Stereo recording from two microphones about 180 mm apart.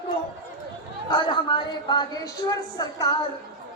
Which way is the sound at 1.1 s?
25° left (ahead or behind).